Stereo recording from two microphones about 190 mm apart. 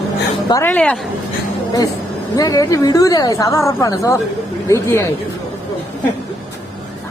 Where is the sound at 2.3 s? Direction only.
20° left (ahead or behind).